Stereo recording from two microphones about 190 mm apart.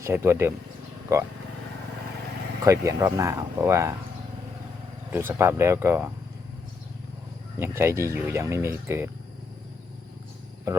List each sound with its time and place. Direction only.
0.0 s speech: 15° right (ahead or behind)
2.6 s speech: 15° right (ahead or behind)
5.1 s speech: 10° right (ahead or behind)
7.6 s speech: 15° right (ahead or behind)